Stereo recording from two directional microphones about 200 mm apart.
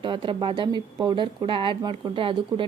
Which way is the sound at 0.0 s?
25° right (ahead or behind).